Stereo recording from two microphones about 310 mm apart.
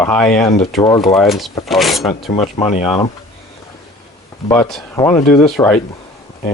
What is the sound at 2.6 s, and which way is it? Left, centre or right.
Speech, centre.